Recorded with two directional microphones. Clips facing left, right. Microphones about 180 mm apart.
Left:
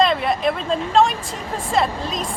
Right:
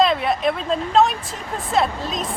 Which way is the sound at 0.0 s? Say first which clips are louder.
Even; centre (ahead or behind).